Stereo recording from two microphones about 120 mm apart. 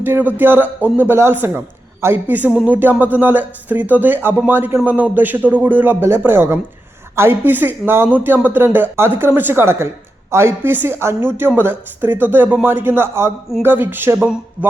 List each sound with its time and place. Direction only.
0.0 s a man's voice: 15° right (ahead or behind)